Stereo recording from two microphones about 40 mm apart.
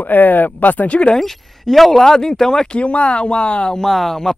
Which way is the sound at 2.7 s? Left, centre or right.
Left.